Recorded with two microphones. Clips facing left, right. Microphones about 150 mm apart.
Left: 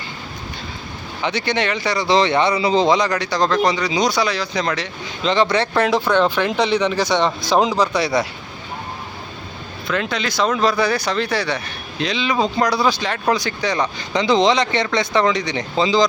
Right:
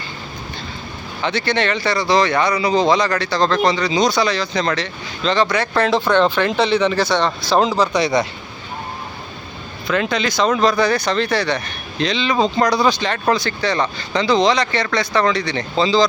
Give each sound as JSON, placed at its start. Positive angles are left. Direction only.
{"t": 1.2, "sound": "speech", "side_deg": 15}
{"t": 5.7, "sound": "speech", "side_deg": 15}
{"t": 9.8, "sound": "speech", "side_deg": 0}